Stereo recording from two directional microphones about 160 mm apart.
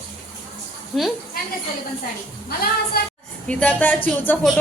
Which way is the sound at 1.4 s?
70° left (ahead or behind).